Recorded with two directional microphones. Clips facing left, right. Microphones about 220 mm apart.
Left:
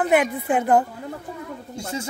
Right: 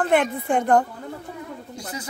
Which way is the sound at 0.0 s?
5° left (ahead or behind).